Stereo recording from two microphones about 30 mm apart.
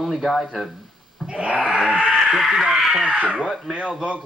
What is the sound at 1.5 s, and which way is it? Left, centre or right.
Speech, right.